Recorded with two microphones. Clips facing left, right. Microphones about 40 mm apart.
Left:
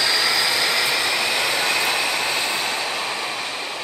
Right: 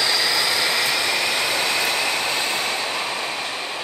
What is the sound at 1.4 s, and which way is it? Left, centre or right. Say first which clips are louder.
Vehicle: left 1 dB; left.